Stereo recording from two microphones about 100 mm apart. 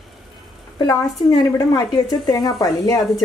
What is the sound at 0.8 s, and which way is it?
A woman's voice, 40° left (ahead or behind).